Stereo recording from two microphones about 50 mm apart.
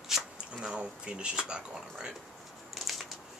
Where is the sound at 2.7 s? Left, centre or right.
Centre.